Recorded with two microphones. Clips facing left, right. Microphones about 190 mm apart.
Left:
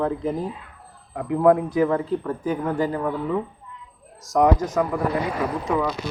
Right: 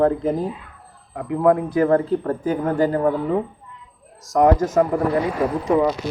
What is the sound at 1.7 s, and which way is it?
Speech, 50° right (ahead or behind).